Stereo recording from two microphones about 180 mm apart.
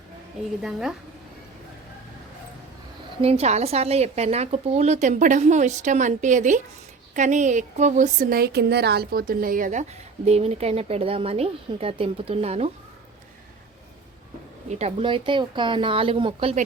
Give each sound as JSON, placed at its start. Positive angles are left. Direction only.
{"t": 0.6, "sound": "a woman's voice", "side_deg": -5}
{"t": 3.2, "sound": "a woman's voice", "side_deg": -35}
{"t": 10.2, "sound": "a woman's voice", "side_deg": -35}
{"t": 14.7, "sound": "speech", "side_deg": -35}